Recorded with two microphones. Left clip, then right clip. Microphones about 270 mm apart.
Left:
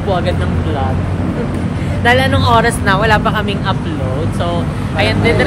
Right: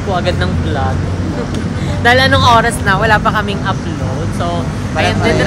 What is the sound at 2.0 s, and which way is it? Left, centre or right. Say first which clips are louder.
Speech: right 3 dB; right.